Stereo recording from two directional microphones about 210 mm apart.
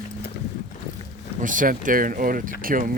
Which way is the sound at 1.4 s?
40° right (ahead or behind).